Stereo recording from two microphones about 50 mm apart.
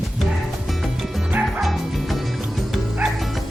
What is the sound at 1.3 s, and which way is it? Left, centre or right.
Bow-wow, right.